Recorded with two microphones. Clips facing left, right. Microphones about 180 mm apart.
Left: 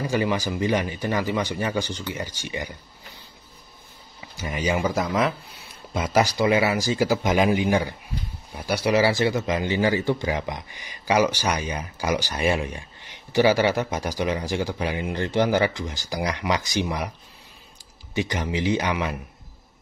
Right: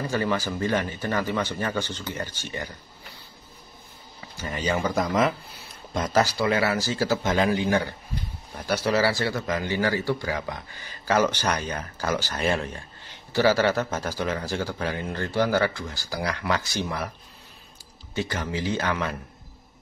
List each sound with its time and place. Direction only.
0.0 s speech: 15° left (ahead or behind)
4.4 s speech: 10° left (ahead or behind)
5.9 s speech: 10° left (ahead or behind)
18.1 s speech: 15° left (ahead or behind)